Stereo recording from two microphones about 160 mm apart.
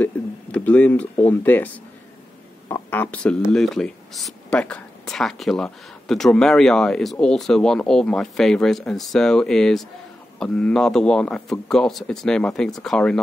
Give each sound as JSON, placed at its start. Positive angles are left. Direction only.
{"t": 0.0, "sound": "a sound", "side_deg": 10}
{"t": 1.1, "sound": "speech", "side_deg": 10}
{"t": 2.7, "sound": "speech", "side_deg": 10}